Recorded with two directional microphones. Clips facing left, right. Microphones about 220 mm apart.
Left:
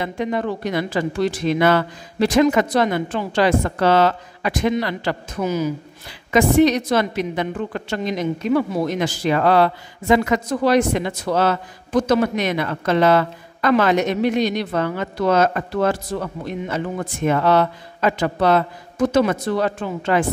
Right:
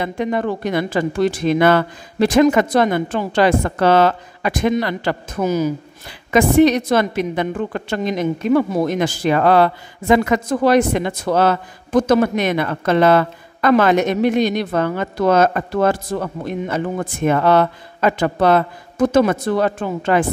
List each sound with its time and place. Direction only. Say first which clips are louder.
0.0 s a woman's voice: right 2 dB; 50° right (ahead or behind)